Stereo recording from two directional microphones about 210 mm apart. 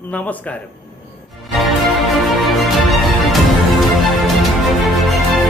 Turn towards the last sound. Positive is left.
turn(degrees=0)  # may be behind; listen again after turning